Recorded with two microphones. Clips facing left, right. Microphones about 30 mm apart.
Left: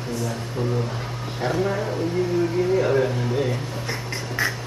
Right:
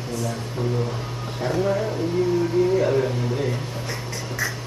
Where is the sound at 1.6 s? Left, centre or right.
Centre.